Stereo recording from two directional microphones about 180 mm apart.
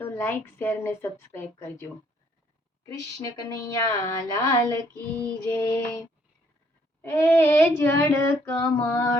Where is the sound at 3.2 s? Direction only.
20° left (ahead or behind).